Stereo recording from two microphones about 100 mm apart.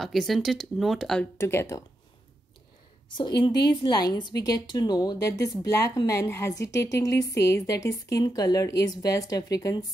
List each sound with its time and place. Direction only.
0.0 s speech: centre (ahead or behind)
1.4 s speech: 25° left (ahead or behind)
3.1 s a woman's voice: 50° left (ahead or behind)